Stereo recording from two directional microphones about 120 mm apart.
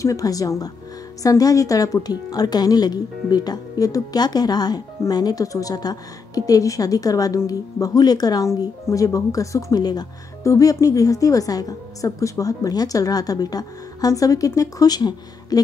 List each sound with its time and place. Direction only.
0.0 s a woman's voice: 30° left (ahead or behind)